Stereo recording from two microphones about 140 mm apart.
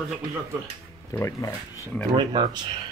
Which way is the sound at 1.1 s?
20° left (ahead or behind).